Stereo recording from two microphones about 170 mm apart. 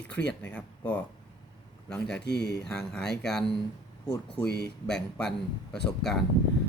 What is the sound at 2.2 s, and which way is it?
Speech, 85° left.